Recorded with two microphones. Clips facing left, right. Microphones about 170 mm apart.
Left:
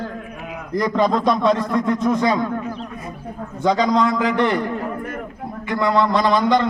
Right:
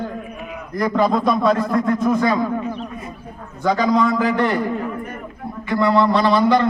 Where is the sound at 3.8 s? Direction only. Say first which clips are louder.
Right 1 dB; 5° right (ahead or behind).